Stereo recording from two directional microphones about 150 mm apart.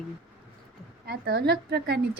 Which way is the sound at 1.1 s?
90° right.